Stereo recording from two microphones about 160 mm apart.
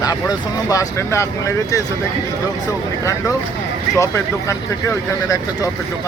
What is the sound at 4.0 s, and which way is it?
Speech, 20° left (ahead or behind).